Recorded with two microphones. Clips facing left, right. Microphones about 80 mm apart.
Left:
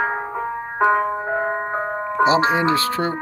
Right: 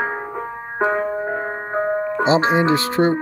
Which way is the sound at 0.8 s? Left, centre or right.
Centre.